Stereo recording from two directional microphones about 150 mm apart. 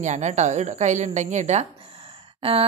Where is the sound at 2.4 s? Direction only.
35° right (ahead or behind).